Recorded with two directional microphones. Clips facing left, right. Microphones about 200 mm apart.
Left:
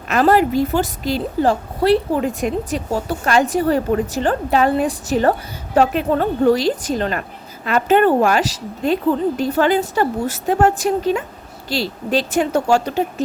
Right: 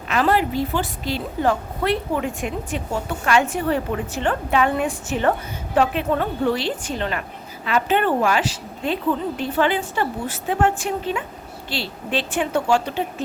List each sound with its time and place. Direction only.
0.1 s a woman's voice: 45° left (ahead or behind)